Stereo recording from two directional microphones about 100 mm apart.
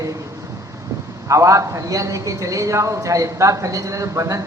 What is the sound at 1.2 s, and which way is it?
A woman's voice, 30° right (ahead or behind).